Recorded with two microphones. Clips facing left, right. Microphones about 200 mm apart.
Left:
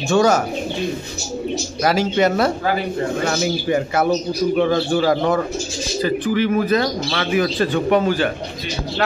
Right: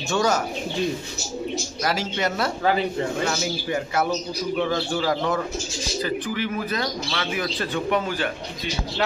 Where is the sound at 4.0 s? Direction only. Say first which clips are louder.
Left 7 dB; 55° left (ahead or behind).